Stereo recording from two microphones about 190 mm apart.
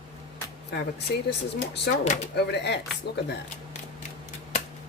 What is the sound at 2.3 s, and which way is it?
Speech, 60° left (ahead or behind).